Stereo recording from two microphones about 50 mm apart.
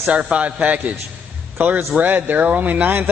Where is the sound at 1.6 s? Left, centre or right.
Right.